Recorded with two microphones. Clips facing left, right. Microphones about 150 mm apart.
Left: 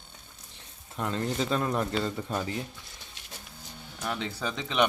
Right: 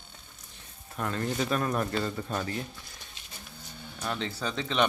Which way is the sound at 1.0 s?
20° left (ahead or behind).